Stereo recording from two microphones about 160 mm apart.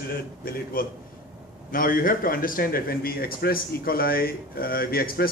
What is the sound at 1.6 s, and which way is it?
A man's voice, 60° left (ahead or behind).